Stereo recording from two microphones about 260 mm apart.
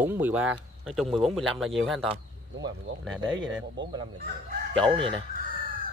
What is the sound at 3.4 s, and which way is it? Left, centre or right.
Speech, right.